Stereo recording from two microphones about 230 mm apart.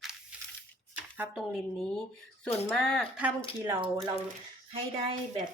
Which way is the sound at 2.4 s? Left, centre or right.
Centre.